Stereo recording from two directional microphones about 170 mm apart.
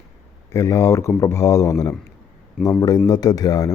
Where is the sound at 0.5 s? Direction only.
20° left (ahead or behind).